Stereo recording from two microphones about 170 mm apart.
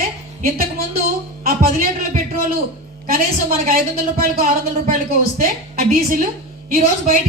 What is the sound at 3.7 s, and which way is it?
A man's voice, 60° right (ahead or behind).